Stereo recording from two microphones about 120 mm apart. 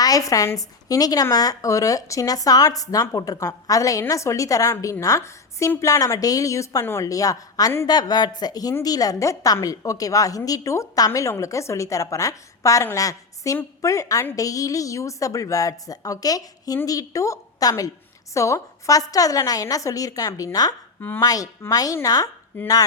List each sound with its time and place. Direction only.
0.0 s a woman's voice: 30° left (ahead or behind)